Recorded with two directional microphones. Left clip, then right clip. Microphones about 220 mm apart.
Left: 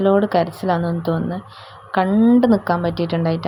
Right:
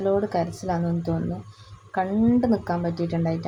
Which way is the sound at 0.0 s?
20° left (ahead or behind).